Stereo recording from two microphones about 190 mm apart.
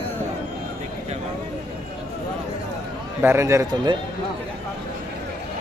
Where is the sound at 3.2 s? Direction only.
15° right (ahead or behind).